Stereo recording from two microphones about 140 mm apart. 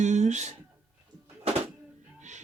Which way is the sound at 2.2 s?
60° right (ahead or behind).